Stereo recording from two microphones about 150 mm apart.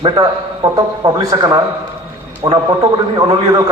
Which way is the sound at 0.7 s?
25° right (ahead or behind).